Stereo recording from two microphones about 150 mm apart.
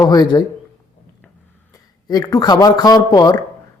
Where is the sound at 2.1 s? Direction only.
25° left (ahead or behind).